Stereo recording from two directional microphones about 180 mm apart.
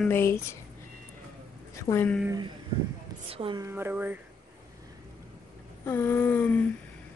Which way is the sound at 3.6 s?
10° right (ahead or behind).